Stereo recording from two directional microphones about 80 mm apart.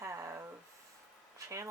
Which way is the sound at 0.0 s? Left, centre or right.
Right.